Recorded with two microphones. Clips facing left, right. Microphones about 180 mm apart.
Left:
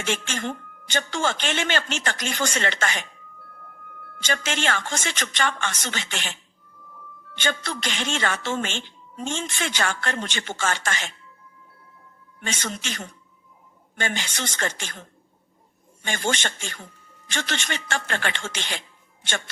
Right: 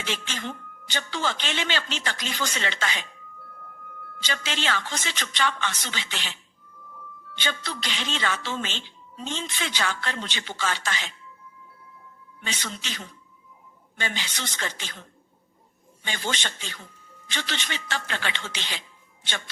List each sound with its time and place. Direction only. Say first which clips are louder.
0.0 s a woman's voice: left 5 dB; 50° left (ahead or behind)
4.3 s a woman's voice: left 3 dB; 50° left (ahead or behind)
7.4 s a woman's voice: left 4 dB; 50° left (ahead or behind)
12.5 s a woman's voice: left 4 dB; 50° left (ahead or behind)
16.0 s a woman's voice: left 5 dB; 50° left (ahead or behind)